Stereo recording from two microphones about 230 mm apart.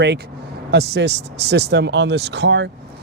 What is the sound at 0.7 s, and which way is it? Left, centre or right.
Speech, right.